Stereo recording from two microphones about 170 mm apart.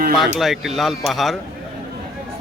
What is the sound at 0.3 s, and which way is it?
A man's voice, centre (ahead or behind).